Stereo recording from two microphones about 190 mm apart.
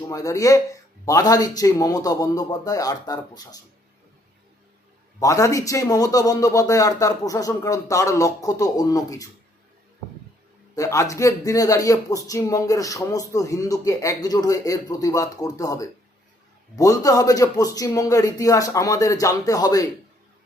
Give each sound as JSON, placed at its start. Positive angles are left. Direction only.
{"t": 0.1, "sound": "a man's voice", "side_deg": 15}
{"t": 5.2, "sound": "speech", "side_deg": 15}
{"t": 10.8, "sound": "speech", "side_deg": 15}